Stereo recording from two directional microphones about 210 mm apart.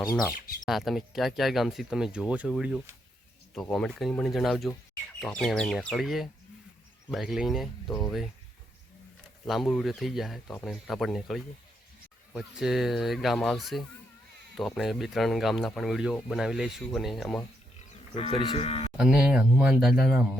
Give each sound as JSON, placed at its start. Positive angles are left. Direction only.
{"t": 0.3, "sound": "speech", "side_deg": 40}
{"t": 0.6, "sound": "speech", "side_deg": 0}
{"t": 9.5, "sound": "speech", "side_deg": 0}
{"t": 18.1, "sound": "speech", "side_deg": 30}
{"t": 18.9, "sound": "speech", "side_deg": -5}